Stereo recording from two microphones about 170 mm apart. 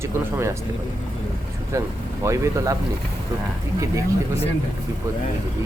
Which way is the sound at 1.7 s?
15° right (ahead or behind).